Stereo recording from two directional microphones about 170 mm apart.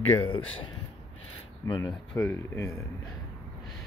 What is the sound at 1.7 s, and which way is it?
Speech, 20° left (ahead or behind).